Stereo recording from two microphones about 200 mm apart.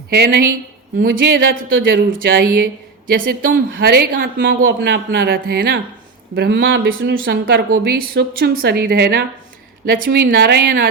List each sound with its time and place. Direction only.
0.1 s a woman's voice: 50° right (ahead or behind)